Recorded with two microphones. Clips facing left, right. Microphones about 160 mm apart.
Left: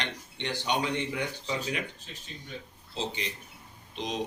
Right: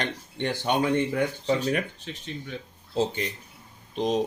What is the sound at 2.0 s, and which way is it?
Speech, 70° right (ahead or behind).